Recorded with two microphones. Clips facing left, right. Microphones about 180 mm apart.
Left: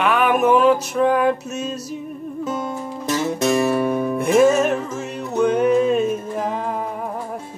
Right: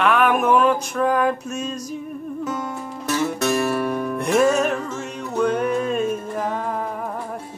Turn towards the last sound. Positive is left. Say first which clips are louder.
# left 1 dB
turn(degrees=5)  # may be behind; listen again after turning